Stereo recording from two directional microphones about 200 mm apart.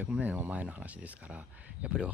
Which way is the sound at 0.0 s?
10° right (ahead or behind).